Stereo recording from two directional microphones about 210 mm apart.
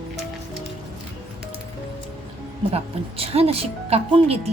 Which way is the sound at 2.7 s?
30° right (ahead or behind).